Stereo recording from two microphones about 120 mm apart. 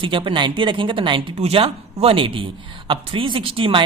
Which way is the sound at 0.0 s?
45° right (ahead or behind).